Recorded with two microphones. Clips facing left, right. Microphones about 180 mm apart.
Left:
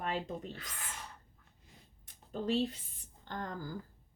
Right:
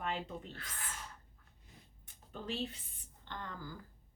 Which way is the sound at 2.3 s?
35° left (ahead or behind).